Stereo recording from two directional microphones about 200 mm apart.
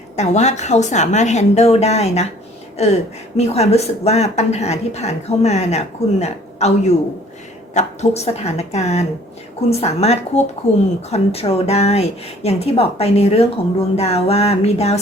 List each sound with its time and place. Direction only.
0.2 s a woman's voice: 35° left (ahead or behind)